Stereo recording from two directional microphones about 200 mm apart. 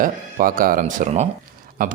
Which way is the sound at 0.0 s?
45° right (ahead or behind).